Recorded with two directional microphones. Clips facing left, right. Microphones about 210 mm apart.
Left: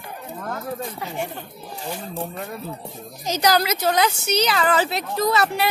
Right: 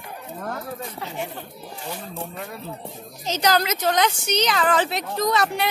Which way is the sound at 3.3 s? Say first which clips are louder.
Left 1 dB; 10° left (ahead or behind).